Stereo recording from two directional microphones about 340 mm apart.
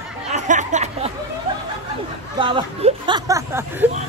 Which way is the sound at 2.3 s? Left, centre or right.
Centre.